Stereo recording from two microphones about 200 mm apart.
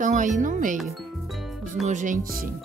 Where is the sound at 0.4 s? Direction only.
40° right (ahead or behind).